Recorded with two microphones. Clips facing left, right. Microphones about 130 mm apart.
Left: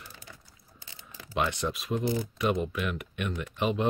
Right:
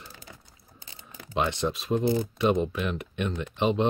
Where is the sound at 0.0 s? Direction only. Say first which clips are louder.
Right 2 dB; 40° right (ahead or behind).